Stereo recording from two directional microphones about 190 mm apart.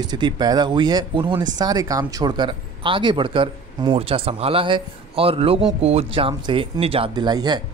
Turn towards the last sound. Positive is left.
turn(degrees=-20)  # may be behind; listen again after turning